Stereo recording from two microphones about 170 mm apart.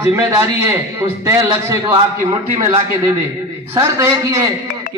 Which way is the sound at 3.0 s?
15° right (ahead or behind).